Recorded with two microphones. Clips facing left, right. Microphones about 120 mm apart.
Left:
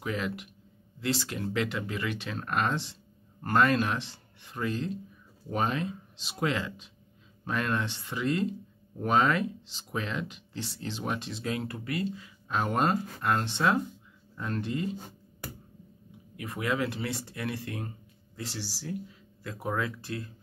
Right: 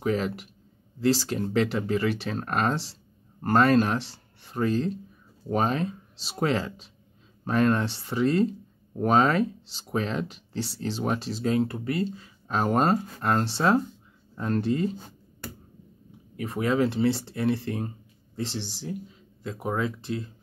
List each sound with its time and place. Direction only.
0.0 s speech: 35° right (ahead or behind)
16.3 s speech: 30° right (ahead or behind)